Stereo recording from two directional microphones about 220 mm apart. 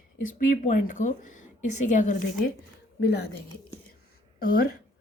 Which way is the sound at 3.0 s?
50° left (ahead or behind).